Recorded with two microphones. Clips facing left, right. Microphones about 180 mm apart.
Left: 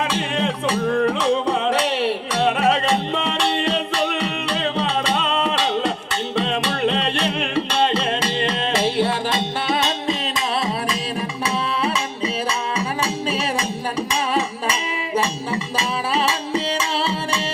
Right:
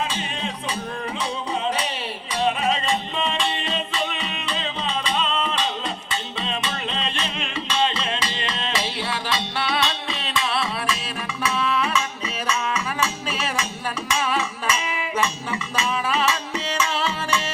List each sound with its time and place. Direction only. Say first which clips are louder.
0.1 s music: left 7 dB; 70° left (ahead or behind); by 17.4 s 30° left (ahead or behind)